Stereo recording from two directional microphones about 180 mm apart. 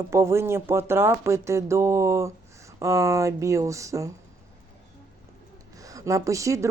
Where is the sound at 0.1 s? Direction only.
15° right (ahead or behind).